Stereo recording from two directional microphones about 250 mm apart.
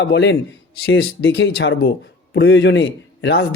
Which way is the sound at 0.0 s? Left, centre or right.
Left.